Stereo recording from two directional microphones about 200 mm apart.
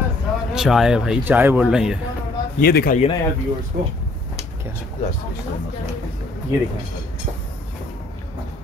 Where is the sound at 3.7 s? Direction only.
45° right (ahead or behind).